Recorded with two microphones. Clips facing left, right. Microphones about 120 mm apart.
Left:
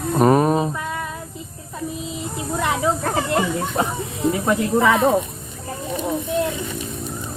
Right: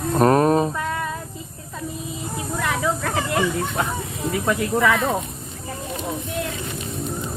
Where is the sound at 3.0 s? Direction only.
35° left (ahead or behind).